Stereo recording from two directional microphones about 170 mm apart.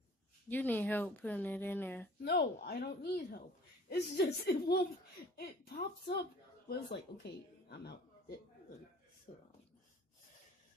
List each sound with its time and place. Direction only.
0.5 s speech: 10° left (ahead or behind)
2.2 s a man's voice: 70° left (ahead or behind)
9.3 s speech: 40° left (ahead or behind)